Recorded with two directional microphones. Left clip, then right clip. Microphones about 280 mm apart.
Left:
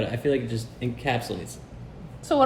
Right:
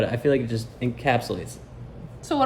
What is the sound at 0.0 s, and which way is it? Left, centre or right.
Speech, centre.